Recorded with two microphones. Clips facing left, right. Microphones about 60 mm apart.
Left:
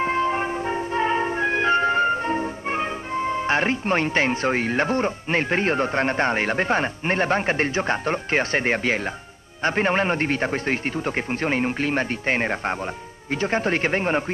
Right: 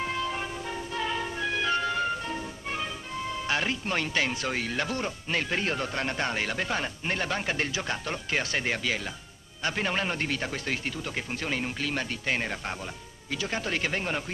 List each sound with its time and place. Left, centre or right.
0.0 s music: left
9.6 s a man's voice: left